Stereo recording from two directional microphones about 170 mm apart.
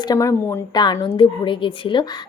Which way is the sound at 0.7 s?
25° left (ahead or behind).